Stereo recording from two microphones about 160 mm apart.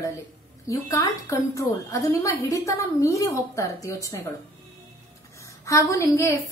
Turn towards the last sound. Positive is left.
turn(degrees=20)  # may be behind; listen again after turning